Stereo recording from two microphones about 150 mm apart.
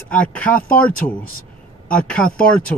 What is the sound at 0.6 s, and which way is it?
Speech, 70° left (ahead or behind).